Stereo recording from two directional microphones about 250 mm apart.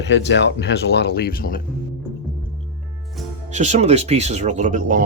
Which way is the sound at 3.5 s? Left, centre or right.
Right.